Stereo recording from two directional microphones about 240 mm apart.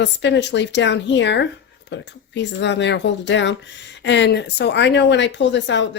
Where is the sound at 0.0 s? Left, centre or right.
Left.